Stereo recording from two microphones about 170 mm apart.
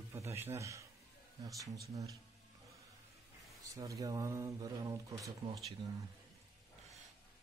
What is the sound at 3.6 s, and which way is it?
Speech, 20° right (ahead or behind).